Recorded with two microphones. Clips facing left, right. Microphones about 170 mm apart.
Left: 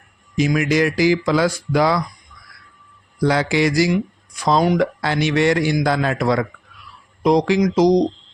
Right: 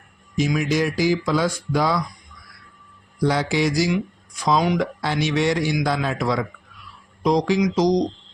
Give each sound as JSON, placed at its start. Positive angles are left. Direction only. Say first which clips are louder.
{"t": 0.3, "sound": "speech", "louder": "left 3 dB", "side_deg": 65}
{"t": 3.2, "sound": "speech", "louder": "left 3 dB", "side_deg": 75}
{"t": 4.4, "sound": "a man's voice", "louder": "left 3 dB", "side_deg": 55}
{"t": 4.9, "sound": "a man's voice", "louder": "left 3 dB", "side_deg": 65}